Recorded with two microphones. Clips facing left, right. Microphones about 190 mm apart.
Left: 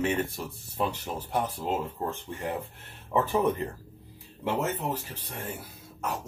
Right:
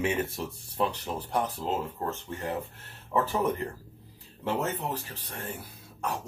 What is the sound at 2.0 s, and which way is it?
Speech, 15° left (ahead or behind).